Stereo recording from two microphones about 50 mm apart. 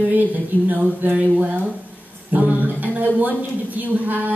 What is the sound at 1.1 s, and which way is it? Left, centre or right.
Speech, right.